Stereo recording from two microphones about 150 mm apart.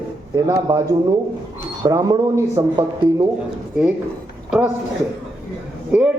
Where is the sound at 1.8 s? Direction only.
25° right (ahead or behind).